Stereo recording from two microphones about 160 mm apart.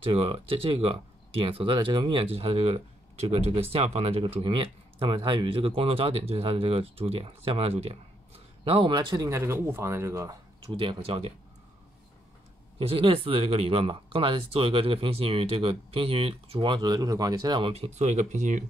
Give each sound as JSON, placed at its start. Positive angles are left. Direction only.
{"t": 0.0, "sound": "speech", "side_deg": -35}
{"t": 10.8, "sound": "speech", "side_deg": -35}
{"t": 12.7, "sound": "speech", "side_deg": -35}